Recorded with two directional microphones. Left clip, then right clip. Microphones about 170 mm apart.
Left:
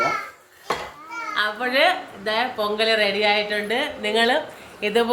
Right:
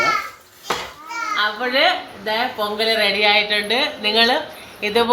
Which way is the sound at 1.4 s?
25° left (ahead or behind).